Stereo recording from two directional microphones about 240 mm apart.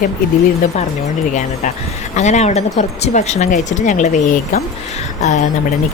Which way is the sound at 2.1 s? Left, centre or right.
Left.